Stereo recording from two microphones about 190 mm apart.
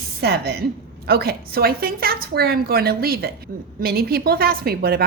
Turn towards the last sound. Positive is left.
turn(degrees=-55)  # may be behind; listen again after turning